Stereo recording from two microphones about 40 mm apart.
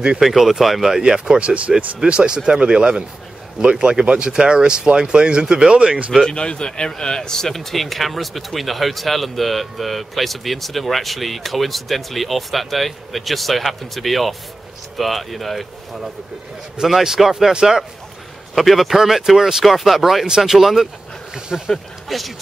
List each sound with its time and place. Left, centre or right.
0.2 s speech: centre
1.0 s speech: centre
6.2 s a man's voice: left; by 17.8 s centre
18.5 s a man's voice: centre
19.6 s speech: centre